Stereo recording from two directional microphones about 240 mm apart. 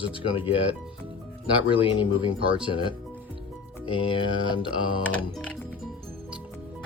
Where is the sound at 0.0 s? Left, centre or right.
Left.